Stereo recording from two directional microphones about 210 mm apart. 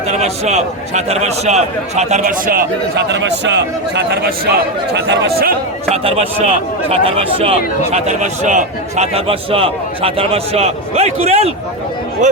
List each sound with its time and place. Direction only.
0.1 s a man's voice: 30° right (ahead or behind); by 5.5 s 50° right (ahead or behind)
5.9 s a man's voice: 30° right (ahead or behind)